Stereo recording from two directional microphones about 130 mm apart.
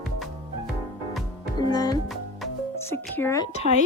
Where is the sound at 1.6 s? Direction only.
30° left (ahead or behind).